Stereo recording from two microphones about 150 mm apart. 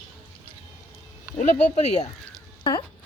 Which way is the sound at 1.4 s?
50° left (ahead or behind).